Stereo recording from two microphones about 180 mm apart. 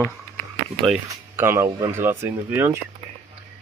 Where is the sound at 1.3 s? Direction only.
15° right (ahead or behind).